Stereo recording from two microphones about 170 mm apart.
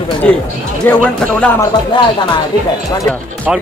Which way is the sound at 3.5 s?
5° right (ahead or behind).